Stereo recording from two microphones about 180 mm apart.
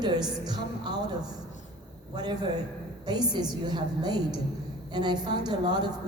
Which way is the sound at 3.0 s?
25° right (ahead or behind).